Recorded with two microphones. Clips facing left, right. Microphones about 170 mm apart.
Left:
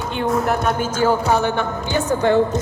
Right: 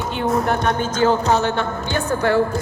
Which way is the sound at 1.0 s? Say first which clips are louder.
Even; 10° left (ahead or behind).